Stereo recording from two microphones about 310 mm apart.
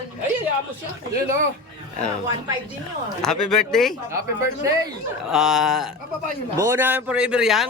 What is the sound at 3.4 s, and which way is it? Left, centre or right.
Speech, left.